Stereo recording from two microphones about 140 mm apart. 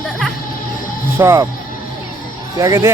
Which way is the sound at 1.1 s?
20° right (ahead or behind).